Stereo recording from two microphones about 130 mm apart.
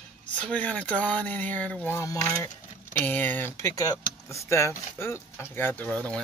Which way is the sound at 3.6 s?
25° left (ahead or behind).